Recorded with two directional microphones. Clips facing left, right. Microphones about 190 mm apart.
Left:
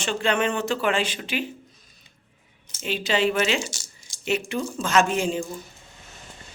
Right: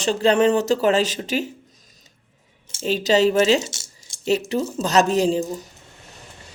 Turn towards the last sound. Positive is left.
turn(degrees=-35)  # may be behind; listen again after turning